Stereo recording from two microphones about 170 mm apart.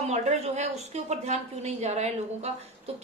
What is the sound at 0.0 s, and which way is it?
A woman's voice, 40° right (ahead or behind).